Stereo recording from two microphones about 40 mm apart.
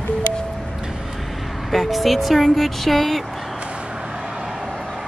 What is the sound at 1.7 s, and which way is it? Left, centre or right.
Speech, centre.